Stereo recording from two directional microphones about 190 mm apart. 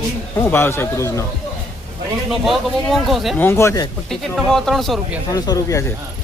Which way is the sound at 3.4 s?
15° left (ahead or behind).